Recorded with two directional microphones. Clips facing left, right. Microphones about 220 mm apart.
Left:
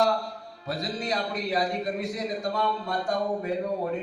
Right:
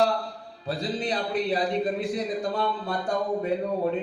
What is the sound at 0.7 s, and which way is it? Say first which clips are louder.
A man's voice: right 2 dB; 30° right (ahead or behind).